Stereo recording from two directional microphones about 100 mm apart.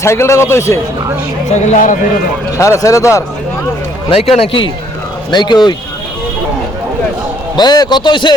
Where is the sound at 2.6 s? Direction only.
30° left (ahead or behind).